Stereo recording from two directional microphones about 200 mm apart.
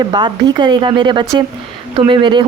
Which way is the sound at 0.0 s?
20° right (ahead or behind).